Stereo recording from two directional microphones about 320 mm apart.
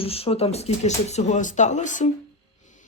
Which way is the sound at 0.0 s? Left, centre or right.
Centre.